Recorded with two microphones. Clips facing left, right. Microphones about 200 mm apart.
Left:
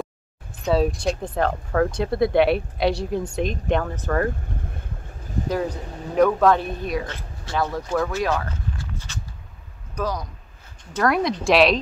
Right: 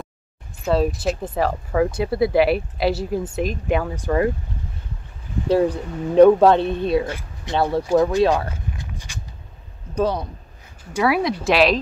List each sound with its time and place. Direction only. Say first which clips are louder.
0.6 s speech: right 1 dB; centre (ahead or behind)
5.5 s speech: right 8 dB; 30° right (ahead or behind)
8.5 s walk: even; 15° right (ahead or behind)
9.9 s speech: right 6 dB; 30° right (ahead or behind)
10.8 s speech: right 1 dB; 10° right (ahead or behind)